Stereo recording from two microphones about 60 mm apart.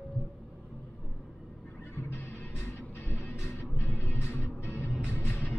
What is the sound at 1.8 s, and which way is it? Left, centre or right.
Music, left.